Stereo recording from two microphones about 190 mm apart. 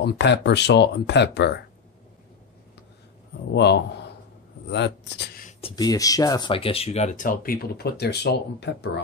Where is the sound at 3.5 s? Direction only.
65° left (ahead or behind).